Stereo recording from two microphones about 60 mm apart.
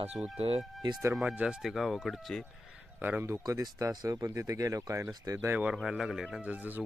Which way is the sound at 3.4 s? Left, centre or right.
Right.